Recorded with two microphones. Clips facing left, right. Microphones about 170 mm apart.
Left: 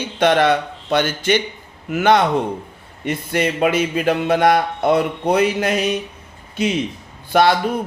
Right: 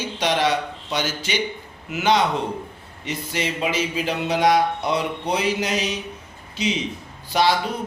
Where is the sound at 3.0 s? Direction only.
55° left (ahead or behind).